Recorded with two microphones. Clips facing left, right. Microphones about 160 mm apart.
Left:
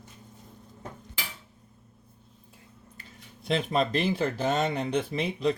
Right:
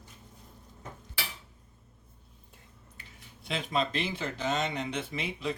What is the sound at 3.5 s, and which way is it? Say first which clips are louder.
Speech: left 5 dB; 40° left (ahead or behind).